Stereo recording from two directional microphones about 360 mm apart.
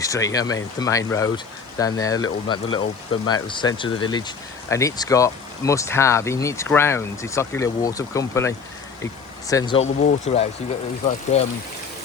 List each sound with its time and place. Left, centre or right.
0.0 s speech: centre